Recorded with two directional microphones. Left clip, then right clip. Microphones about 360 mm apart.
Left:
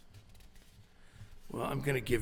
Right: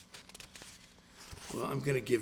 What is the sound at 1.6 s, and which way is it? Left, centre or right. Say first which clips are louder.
Speech: even; left.